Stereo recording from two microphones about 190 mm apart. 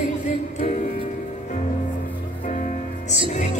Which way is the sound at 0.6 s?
40° left (ahead or behind).